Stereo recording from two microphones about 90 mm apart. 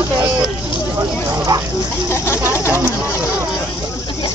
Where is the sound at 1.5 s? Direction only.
45° right (ahead or behind).